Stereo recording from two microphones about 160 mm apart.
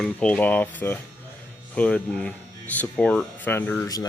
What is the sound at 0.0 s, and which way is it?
Speech, 5° left (ahead or behind).